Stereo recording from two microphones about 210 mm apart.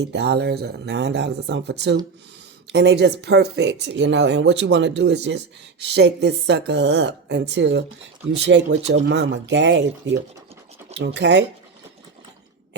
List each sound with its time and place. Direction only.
0.0 s a woman's voice: 55° right (ahead or behind)